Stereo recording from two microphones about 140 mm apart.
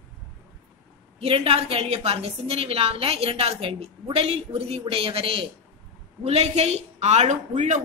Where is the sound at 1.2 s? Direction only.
45° right (ahead or behind).